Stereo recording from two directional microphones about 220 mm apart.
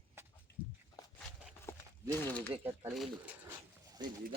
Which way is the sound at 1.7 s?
10° left (ahead or behind).